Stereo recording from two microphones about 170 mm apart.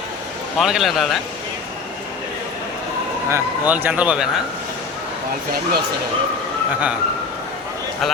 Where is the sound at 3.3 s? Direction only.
10° right (ahead or behind).